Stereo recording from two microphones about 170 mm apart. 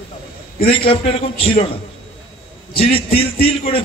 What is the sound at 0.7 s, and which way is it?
Speech, 30° left (ahead or behind).